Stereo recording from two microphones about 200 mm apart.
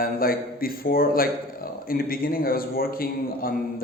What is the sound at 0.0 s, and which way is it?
A man's voice, 45° left (ahead or behind).